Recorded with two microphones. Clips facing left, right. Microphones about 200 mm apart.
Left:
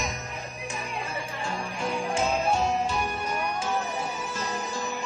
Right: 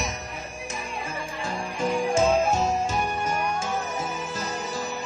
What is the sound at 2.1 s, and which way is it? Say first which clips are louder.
Music: right 4 dB; 40° right (ahead or behind).